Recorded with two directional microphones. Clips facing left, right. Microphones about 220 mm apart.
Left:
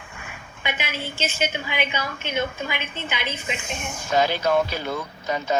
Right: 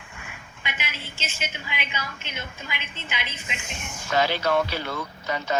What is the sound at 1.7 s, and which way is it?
A woman's voice, 55° left (ahead or behind).